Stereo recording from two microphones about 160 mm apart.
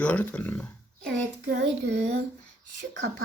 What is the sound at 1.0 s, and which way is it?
Child singing, 90° right.